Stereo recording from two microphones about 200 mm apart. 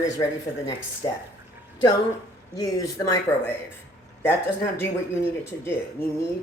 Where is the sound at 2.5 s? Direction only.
15° left (ahead or behind).